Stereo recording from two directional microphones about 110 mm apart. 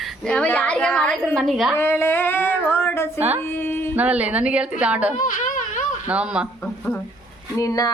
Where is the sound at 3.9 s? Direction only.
10° right (ahead or behind).